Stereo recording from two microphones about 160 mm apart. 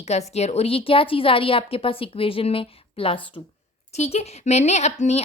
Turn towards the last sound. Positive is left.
turn(degrees=45)  # may be behind; listen again after turning